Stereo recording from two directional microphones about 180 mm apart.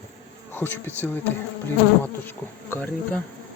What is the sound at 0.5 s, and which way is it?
Speech, 10° left (ahead or behind).